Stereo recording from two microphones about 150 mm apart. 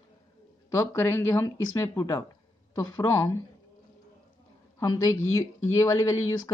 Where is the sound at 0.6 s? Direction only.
20° left (ahead or behind).